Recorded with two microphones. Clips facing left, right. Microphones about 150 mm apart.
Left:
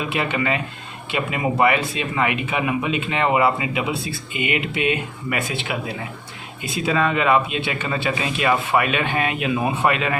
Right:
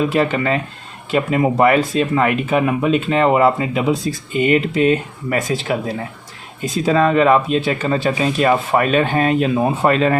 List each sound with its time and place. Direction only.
0.0 s speech: 40° right (ahead or behind)